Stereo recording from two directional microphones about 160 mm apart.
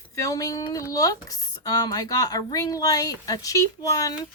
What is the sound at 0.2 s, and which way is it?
Speech, 20° left (ahead or behind).